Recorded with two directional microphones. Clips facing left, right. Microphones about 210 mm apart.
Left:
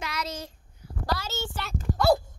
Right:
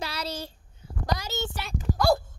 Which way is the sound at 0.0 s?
30° right (ahead or behind).